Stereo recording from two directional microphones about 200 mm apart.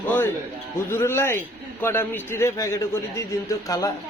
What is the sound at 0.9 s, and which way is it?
Speech, 10° left (ahead or behind).